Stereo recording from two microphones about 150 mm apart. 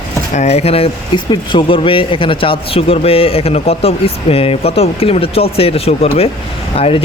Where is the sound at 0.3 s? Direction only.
45° left (ahead or behind).